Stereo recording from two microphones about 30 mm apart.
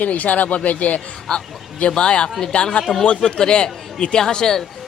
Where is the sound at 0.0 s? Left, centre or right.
Left.